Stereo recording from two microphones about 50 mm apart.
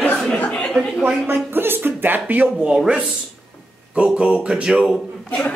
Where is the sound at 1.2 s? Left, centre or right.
Right.